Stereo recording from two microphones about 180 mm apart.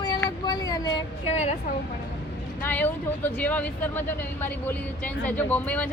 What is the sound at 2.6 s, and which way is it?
Speech, 10° left (ahead or behind).